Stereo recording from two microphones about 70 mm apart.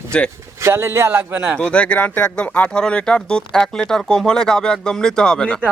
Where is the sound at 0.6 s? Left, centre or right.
Right.